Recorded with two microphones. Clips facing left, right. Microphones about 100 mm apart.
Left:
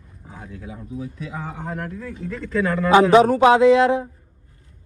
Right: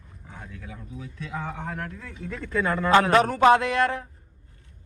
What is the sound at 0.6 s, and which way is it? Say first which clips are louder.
Speech: left 5 dB; 20° left (ahead or behind).